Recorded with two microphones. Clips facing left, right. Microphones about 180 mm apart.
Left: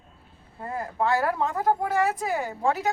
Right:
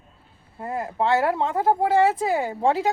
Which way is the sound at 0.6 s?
20° right (ahead or behind).